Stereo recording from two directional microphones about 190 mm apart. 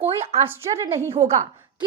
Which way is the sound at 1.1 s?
35° right (ahead or behind).